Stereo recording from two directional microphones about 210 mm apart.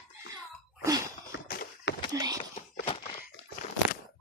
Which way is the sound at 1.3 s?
50° left (ahead or behind).